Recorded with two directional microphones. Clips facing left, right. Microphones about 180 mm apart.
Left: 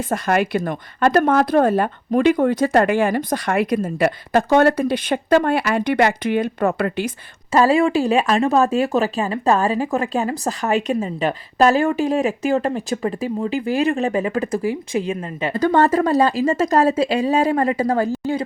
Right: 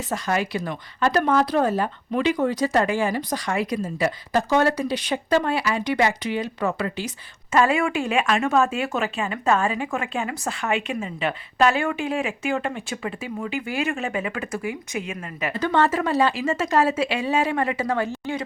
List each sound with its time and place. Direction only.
0.1 s a woman's voice: 55° left (ahead or behind)
7.5 s speech: 35° left (ahead or behind)
15.5 s speech: 40° left (ahead or behind)